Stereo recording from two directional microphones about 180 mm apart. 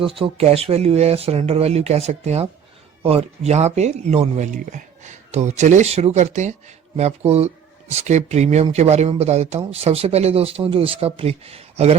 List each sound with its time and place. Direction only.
0.0 s speech: 30° right (ahead or behind)